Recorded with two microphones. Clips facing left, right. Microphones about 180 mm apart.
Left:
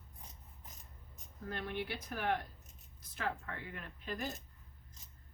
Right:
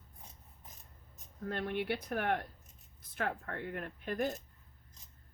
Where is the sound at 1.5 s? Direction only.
60° right (ahead or behind).